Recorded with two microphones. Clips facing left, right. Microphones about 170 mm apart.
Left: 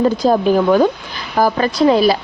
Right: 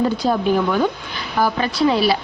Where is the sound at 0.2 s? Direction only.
40° left (ahead or behind).